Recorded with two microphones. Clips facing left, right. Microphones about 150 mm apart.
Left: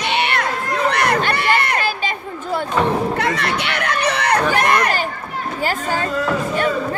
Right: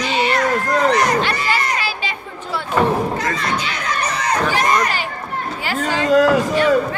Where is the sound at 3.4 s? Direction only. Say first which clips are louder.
Left 1 dB; 65° left (ahead or behind).